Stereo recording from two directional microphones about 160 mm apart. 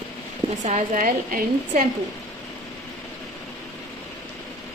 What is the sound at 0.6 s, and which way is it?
Speech, 45° right (ahead or behind).